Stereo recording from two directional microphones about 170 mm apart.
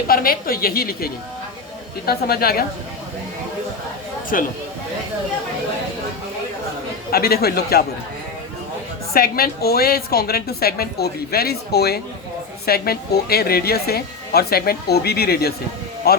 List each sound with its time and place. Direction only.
0.1 s a woman's voice: 60° left (ahead or behind)
4.3 s speech: 50° left (ahead or behind)
7.1 s a woman's voice: 65° left (ahead or behind)
9.1 s a woman's voice: 60° left (ahead or behind)